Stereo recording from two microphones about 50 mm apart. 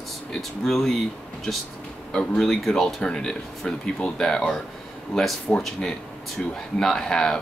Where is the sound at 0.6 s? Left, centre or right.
Centre.